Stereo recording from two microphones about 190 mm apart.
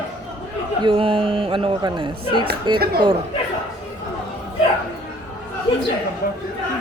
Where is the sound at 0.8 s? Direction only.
30° right (ahead or behind).